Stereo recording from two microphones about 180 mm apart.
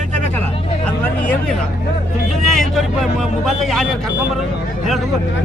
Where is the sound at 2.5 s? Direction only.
Centre (ahead or behind).